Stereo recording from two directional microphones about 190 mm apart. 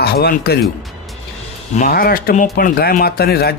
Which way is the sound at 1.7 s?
45° left (ahead or behind).